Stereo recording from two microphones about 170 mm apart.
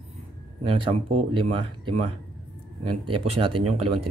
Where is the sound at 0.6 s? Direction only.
35° right (ahead or behind).